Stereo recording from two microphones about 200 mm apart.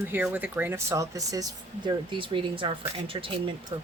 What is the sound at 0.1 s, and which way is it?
Speech, 10° right (ahead or behind).